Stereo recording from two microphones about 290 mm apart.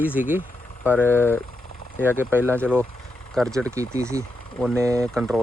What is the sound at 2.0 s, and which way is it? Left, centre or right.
Speech, centre.